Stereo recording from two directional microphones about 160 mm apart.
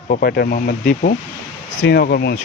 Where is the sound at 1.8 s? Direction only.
85° left.